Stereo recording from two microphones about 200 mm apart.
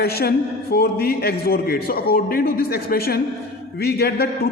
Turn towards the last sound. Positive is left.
turn(degrees=55)  # may be behind; listen again after turning